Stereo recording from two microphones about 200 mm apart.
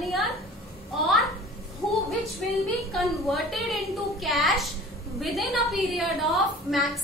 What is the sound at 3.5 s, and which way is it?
A woman's voice, centre (ahead or behind).